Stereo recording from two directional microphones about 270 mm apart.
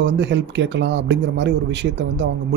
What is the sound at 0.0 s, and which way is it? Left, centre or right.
A man's voice, right.